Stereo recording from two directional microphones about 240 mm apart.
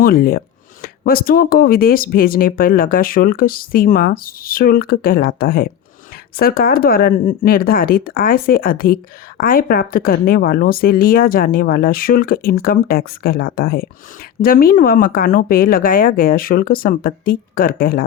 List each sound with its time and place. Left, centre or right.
0.0 s speech: left